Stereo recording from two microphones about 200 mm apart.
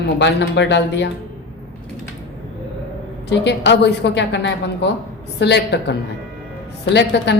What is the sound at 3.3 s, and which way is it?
A woman's voice, 60° left (ahead or behind).